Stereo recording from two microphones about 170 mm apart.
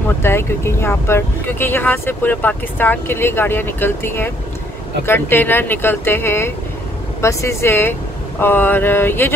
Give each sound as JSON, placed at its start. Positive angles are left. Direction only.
{"t": 0.2, "sound": "speech", "side_deg": 15}